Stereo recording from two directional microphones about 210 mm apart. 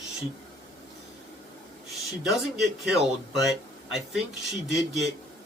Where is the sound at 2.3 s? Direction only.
Centre (ahead or behind).